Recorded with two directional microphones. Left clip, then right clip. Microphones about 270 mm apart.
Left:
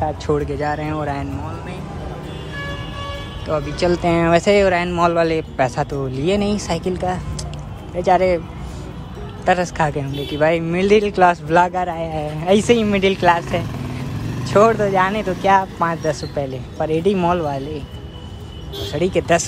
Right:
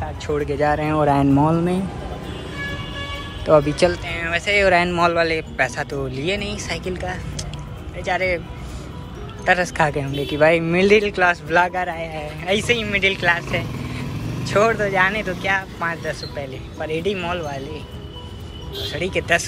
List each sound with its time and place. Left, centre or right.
0.0 s speech: centre
3.4 s speech: centre
4.0 s speech: centre
9.4 s speech: centre
18.9 s speech: centre